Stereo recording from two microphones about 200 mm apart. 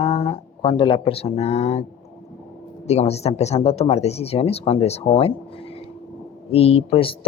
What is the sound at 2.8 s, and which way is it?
A woman's voice, 35° left (ahead or behind).